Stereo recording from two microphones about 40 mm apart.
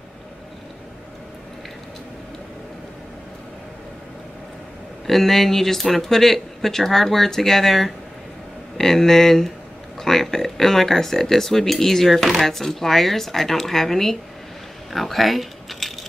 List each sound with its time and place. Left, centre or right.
5.0 s speech: centre
14.9 s keys jangling: centre